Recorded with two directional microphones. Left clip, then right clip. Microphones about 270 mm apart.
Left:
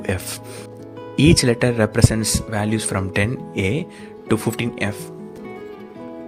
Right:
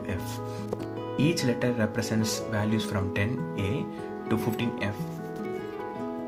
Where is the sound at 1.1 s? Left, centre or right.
Left.